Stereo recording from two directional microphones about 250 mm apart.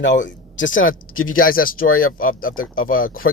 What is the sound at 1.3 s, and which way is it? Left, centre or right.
Speech, left.